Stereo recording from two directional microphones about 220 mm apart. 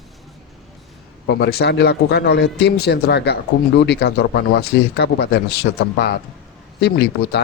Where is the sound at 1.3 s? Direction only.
45° left (ahead or behind).